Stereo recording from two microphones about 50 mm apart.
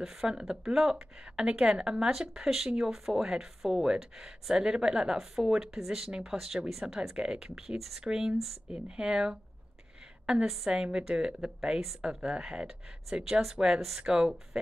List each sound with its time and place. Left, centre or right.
0.0 s speech: centre
12.6 s speech: centre